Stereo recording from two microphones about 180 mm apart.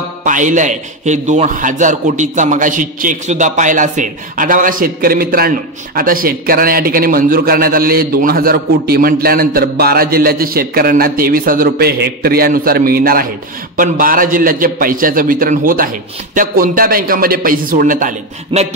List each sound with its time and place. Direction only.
0.2 s a man's voice: 45° right (ahead or behind)